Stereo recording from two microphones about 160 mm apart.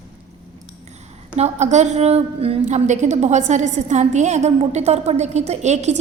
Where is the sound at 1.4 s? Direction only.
45° right (ahead or behind).